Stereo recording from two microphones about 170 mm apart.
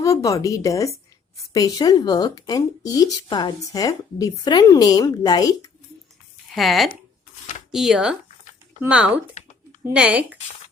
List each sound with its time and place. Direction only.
0.0 s speech: 20° left (ahead or behind)
6.5 s speech: centre (ahead or behind)